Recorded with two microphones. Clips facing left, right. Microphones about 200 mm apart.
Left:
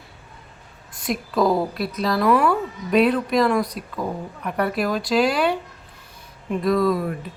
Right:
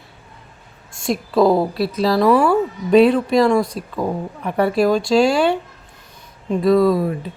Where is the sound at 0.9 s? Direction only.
30° right (ahead or behind).